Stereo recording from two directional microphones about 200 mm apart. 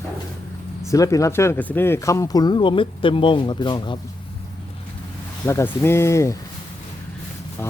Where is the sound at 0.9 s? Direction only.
15° left (ahead or behind).